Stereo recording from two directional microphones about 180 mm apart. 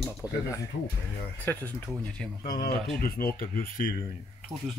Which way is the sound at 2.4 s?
55° left (ahead or behind).